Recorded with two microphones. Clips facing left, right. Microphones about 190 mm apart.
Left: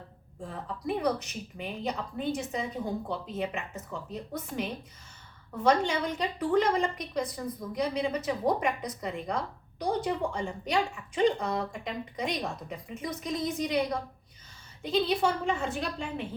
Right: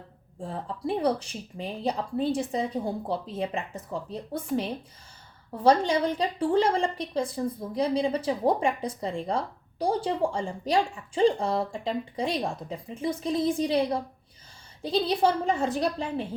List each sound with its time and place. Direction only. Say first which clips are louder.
0.4 s a woman's voice: right 3 dB; 30° right (ahead or behind)